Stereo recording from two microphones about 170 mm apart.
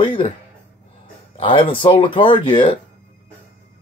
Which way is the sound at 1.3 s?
30° left (ahead or behind).